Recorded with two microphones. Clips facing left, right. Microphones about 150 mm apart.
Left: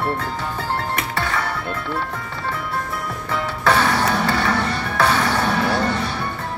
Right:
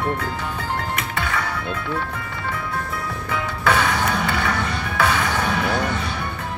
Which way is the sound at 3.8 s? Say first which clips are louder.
Left 2 dB; 25° left (ahead or behind).